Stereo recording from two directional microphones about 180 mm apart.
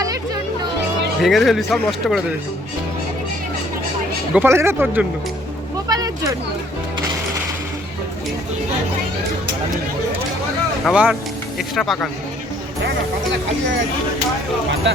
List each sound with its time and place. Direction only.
1.2 s speech: centre (ahead or behind)
4.4 s speech: 15° right (ahead or behind)
5.9 s a sound: 20° right (ahead or behind)
10.8 s speech: 5° right (ahead or behind)
12.8 s a sound: 70° right (ahead or behind)
14.8 s speech: 80° right